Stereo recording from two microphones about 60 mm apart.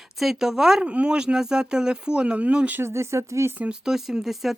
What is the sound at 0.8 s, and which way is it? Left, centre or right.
Speech, centre.